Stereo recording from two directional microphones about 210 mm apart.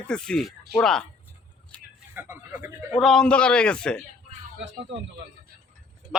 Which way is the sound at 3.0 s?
Centre (ahead or behind).